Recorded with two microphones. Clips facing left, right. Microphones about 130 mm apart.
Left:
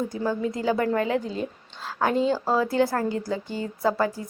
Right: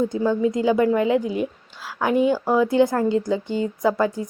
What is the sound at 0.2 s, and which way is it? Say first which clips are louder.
A woman's voice: right 5 dB; 20° right (ahead or behind).